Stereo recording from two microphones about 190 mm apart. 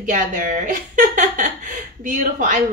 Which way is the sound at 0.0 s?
45° right (ahead or behind).